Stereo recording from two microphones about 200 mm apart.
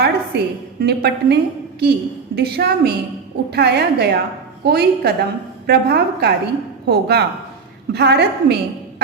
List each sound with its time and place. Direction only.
0.0 s a woman's voice: 55° right (ahead or behind)